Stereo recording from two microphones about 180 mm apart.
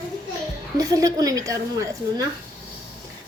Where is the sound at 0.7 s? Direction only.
20° right (ahead or behind).